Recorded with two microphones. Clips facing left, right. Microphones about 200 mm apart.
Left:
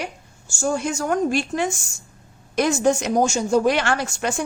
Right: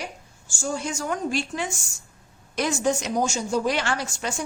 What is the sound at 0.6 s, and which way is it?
A woman's voice, 55° left (ahead or behind).